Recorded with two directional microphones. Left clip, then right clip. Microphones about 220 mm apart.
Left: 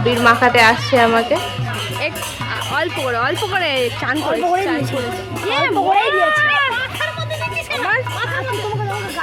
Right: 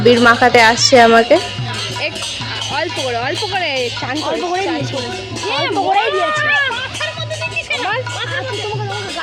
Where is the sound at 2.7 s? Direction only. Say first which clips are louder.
Left 1 dB; 10° left (ahead or behind).